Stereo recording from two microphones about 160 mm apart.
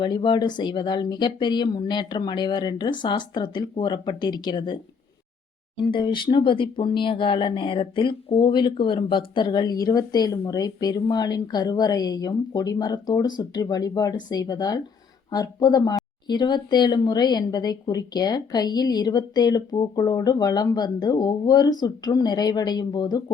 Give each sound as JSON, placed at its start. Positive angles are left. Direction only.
{"t": 0.0, "sound": "speech", "side_deg": 30}
{"t": 5.9, "sound": "speech", "side_deg": 30}